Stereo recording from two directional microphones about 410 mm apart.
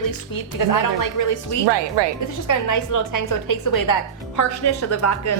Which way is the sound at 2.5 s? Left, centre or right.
Left.